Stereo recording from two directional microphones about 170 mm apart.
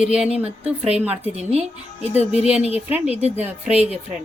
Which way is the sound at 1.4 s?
40° right (ahead or behind).